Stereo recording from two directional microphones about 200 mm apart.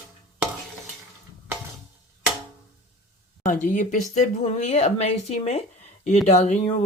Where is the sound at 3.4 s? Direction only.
40° left (ahead or behind).